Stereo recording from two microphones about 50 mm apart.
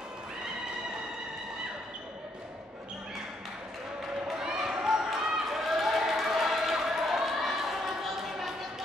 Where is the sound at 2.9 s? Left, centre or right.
Centre.